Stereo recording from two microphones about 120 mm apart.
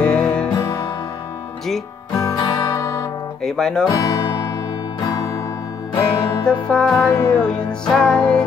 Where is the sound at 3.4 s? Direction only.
5° left (ahead or behind).